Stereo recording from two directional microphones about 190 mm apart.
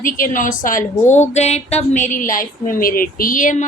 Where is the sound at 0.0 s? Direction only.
45° left (ahead or behind).